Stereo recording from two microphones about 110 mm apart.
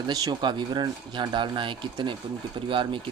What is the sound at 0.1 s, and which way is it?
Speech, 40° right (ahead or behind).